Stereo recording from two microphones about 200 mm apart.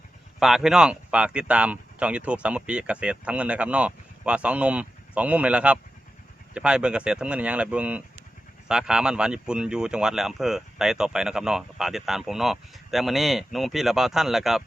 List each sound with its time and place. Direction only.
0.3 s speech: centre (ahead or behind)